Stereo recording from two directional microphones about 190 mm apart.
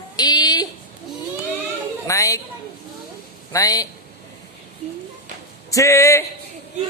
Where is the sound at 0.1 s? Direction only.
20° left (ahead or behind).